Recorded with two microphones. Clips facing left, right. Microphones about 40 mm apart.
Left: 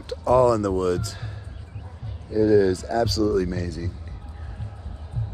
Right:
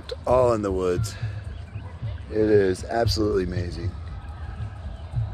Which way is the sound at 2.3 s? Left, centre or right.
Right.